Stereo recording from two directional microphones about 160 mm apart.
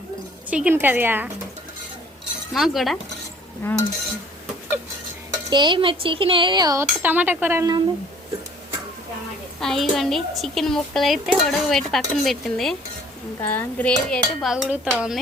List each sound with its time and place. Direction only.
0.5 s speech: 10° right (ahead or behind)
2.5 s a woman's voice: centre (ahead or behind)
3.6 s cutlery: 10° left (ahead or behind)
5.5 s speech: 30° right (ahead or behind)
6.8 s speech: 10° right (ahead or behind)
9.6 s a woman's voice: centre (ahead or behind)